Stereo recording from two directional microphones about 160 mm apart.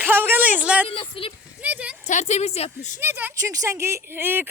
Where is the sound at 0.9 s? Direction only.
35° left (ahead or behind).